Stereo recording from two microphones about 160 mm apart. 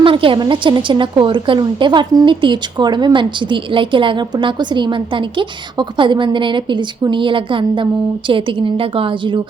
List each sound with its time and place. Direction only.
0.0 s a woman's voice: 35° right (ahead or behind)